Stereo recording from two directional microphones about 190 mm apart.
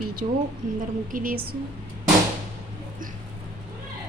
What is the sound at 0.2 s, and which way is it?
Speech, 30° right (ahead or behind).